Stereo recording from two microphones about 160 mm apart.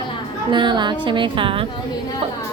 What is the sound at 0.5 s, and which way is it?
A woman's voice, 30° right (ahead or behind).